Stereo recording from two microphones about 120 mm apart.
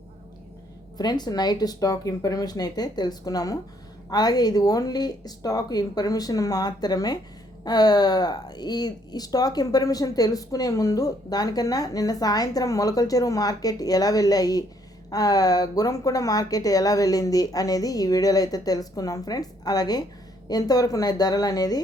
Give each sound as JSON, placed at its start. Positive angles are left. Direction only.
{"t": 0.9, "sound": "speech", "side_deg": 35}